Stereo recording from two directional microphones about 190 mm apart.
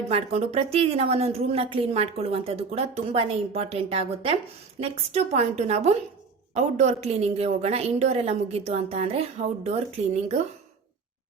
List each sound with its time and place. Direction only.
0.1 s a woman's voice: 35° right (ahead or behind)